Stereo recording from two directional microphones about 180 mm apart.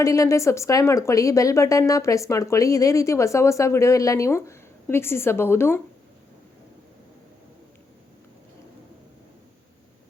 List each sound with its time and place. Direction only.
0.0 s speech: 15° left (ahead or behind)